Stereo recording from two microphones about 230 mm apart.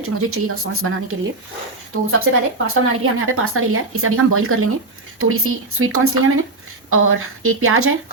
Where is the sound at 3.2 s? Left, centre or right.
Right.